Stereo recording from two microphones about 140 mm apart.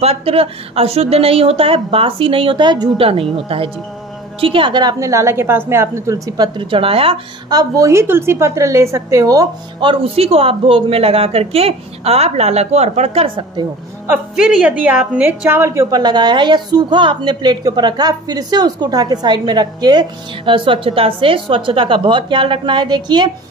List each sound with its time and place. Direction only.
0.0 s a woman's voice: 45° right (ahead or behind)
7.4 s a woman's voice: 25° right (ahead or behind)
9.8 s speech: 40° right (ahead or behind)
14.0 s a woman's voice: 10° right (ahead or behind); by 23.3 s 30° right (ahead or behind)